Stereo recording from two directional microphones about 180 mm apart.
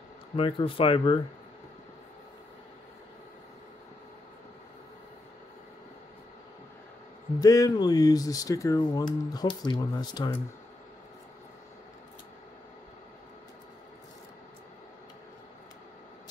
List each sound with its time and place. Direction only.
0.4 s speech: 30° left (ahead or behind)
7.3 s speech: 20° left (ahead or behind)